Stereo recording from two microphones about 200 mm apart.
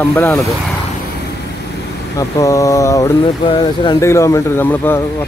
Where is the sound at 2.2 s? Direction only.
15° left (ahead or behind).